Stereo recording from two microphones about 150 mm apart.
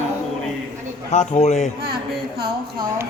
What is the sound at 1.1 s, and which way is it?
Speech, 50° left (ahead or behind).